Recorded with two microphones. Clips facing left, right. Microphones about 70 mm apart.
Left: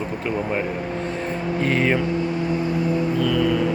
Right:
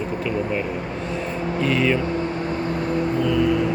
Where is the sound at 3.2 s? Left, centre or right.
Left.